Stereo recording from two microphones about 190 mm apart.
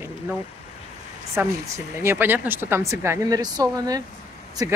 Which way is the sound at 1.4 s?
10° right (ahead or behind).